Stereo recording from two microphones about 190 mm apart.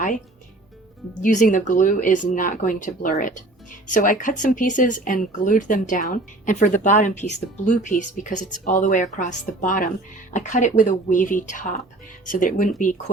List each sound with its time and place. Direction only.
1.2 s speech: 45° left (ahead or behind)